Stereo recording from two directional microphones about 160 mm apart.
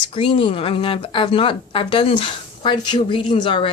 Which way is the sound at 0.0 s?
35° left (ahead or behind).